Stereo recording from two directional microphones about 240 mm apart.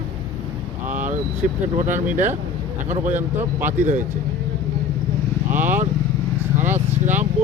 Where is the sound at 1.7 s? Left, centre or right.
Right.